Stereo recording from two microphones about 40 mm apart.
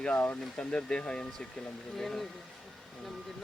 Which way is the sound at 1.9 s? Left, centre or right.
Centre.